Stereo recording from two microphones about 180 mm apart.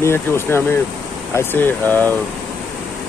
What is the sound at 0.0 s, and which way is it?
Speech, 15° left (ahead or behind).